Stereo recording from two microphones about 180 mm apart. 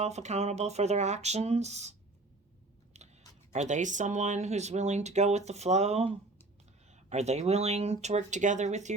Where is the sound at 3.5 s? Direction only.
40° right (ahead or behind).